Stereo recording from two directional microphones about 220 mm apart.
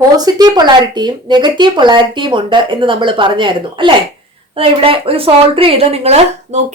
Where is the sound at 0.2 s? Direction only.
15° right (ahead or behind).